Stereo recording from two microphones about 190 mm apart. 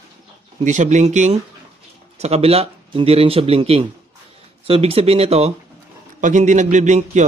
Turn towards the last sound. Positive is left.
turn(degrees=-40)  # may be behind; listen again after turning